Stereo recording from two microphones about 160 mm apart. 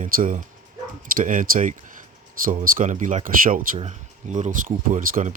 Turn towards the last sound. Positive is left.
turn(degrees=-55)  # may be behind; listen again after turning